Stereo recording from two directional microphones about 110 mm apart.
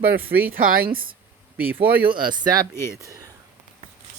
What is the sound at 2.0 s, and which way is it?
Speech, 45° right (ahead or behind).